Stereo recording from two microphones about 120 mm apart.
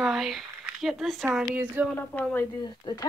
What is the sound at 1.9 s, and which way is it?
Speech, 15° left (ahead or behind).